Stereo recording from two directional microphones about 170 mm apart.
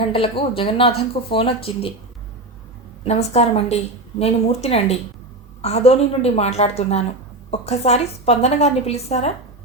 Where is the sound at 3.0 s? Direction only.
40° left (ahead or behind).